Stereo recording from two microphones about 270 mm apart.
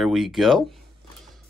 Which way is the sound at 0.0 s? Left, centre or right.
Centre.